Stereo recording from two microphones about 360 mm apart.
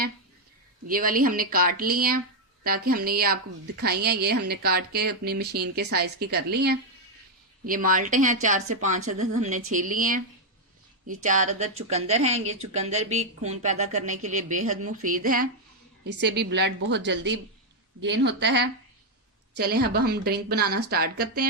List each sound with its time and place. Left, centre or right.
0.9 s a woman's voice: right
11.2 s a woman's voice: centre